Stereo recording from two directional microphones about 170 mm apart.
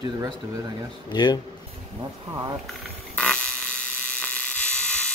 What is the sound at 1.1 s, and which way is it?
Speech, 25° left (ahead or behind).